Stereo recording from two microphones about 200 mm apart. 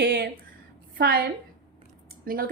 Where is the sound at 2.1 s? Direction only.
45° right (ahead or behind).